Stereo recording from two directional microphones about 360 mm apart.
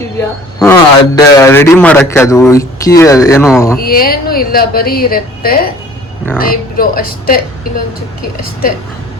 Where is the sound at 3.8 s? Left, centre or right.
Left.